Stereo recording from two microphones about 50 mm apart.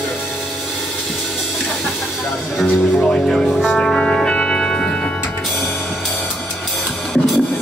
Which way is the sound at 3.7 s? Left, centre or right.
Centre.